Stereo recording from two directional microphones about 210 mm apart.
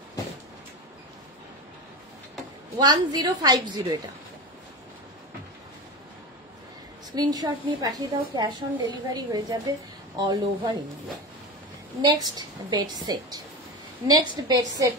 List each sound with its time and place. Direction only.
2.8 s a woman's voice: 20° right (ahead or behind)
7.2 s a woman's voice: 20° right (ahead or behind)
12.0 s a woman's voice: 20° right (ahead or behind)